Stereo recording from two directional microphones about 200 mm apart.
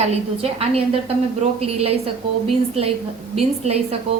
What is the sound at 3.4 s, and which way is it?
Speech, 30° right (ahead or behind).